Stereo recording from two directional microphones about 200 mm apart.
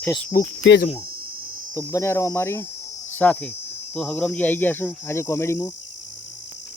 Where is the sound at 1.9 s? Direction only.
15° left (ahead or behind).